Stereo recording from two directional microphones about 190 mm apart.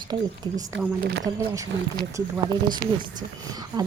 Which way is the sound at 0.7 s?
70° right (ahead or behind).